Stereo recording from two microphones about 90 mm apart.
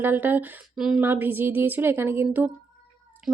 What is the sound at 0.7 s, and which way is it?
Speech, 5° right (ahead or behind).